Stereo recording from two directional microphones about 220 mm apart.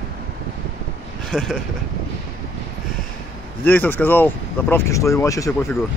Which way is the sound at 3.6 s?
10° left (ahead or behind).